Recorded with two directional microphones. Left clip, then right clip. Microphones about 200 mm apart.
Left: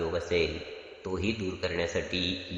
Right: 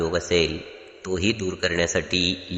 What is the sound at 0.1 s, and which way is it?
A man's voice, 25° right (ahead or behind).